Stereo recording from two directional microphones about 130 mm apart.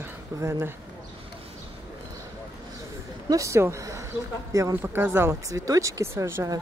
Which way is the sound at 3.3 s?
25° right (ahead or behind).